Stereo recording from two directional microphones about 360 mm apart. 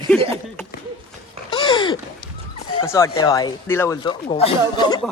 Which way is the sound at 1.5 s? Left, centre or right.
Centre.